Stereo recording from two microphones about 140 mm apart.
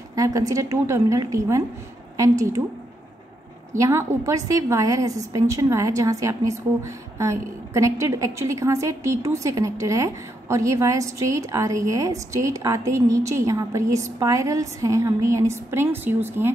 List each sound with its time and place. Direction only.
0.1 s a woman's voice: 25° right (ahead or behind)
3.7 s a woman's voice: 20° right (ahead or behind)